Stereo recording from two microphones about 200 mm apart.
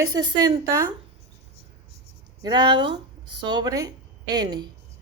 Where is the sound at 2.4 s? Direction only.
20° right (ahead or behind).